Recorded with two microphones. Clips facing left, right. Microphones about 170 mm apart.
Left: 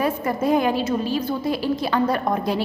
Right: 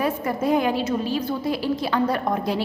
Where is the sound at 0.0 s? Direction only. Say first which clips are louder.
Left 1 dB; 45° left (ahead or behind).